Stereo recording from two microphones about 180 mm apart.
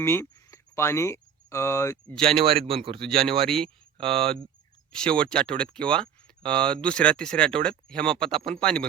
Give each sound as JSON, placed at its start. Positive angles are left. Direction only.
{"t": 0.0, "sound": "speech", "side_deg": 15}
{"t": 2.3, "sound": "a man's voice", "side_deg": -30}
{"t": 3.0, "sound": "speech", "side_deg": 5}